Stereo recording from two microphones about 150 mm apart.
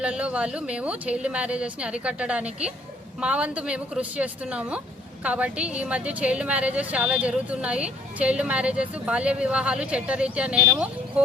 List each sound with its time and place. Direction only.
0.0 s a woman's voice: 5° right (ahead or behind)